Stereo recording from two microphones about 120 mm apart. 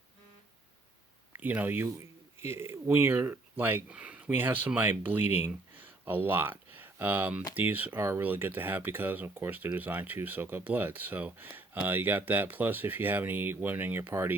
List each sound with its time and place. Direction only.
1.3 s speech: 15° right (ahead or behind)